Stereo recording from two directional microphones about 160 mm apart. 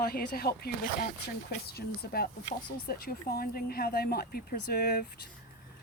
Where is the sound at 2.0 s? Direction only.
90° left.